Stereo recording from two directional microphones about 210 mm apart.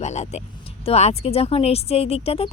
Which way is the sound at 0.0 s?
35° left (ahead or behind).